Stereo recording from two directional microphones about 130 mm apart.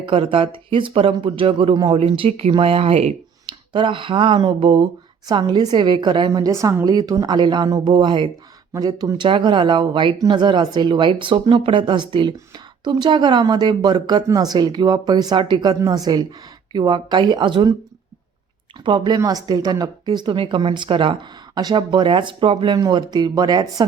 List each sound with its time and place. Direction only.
0.0 s speech: 40° right (ahead or behind)
3.4 s speech: 35° right (ahead or behind)
18.9 s speech: 35° right (ahead or behind)